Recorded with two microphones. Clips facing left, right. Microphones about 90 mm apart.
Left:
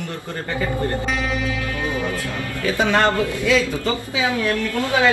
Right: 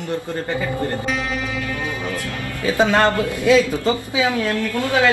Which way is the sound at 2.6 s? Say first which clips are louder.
Right 2 dB; 20° right (ahead or behind).